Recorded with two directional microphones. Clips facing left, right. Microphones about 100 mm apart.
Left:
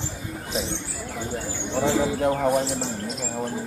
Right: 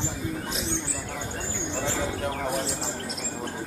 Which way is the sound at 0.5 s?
Centre (ahead or behind).